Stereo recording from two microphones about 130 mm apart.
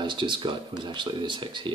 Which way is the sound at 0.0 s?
40° right (ahead or behind).